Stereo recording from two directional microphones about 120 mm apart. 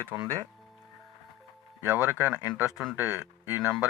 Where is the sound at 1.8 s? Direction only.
15° right (ahead or behind).